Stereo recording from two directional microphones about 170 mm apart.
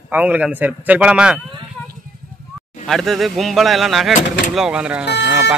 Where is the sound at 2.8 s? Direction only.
Centre (ahead or behind).